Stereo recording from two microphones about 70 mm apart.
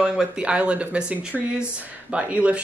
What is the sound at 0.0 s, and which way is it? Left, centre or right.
Speech, centre.